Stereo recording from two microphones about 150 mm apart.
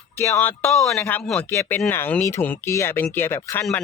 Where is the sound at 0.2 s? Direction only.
15° left (ahead or behind).